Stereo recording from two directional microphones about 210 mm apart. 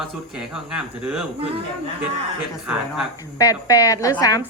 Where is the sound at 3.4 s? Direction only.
15° left (ahead or behind).